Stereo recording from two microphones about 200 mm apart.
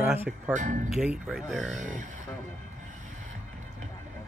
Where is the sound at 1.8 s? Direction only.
40° right (ahead or behind).